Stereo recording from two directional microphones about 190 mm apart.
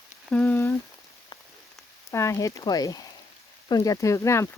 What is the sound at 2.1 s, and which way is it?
Speech, 15° left (ahead or behind).